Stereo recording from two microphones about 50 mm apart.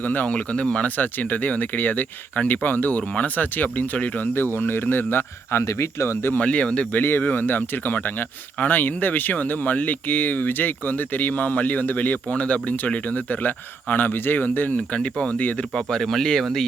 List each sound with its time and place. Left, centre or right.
0.3 s speech: left
0.9 s speech: left
4.5 s speech: left
6.3 s speech: left
7.2 s speech: left
13.9 s speech: left
14.8 s speech: left
15.7 s speech: centre